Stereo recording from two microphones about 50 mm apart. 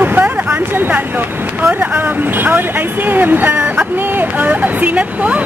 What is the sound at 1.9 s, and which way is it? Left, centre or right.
Speech, right.